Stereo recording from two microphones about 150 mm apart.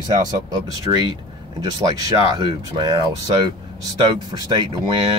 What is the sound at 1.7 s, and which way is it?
Speech, 25° right (ahead or behind).